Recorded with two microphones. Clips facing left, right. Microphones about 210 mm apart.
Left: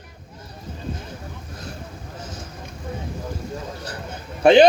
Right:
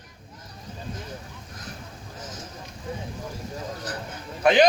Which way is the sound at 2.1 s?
30° left (ahead or behind).